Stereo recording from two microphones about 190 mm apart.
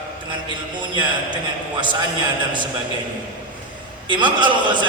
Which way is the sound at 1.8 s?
25° right (ahead or behind).